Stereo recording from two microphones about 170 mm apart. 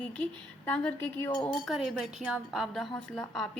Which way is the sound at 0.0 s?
10° left (ahead or behind).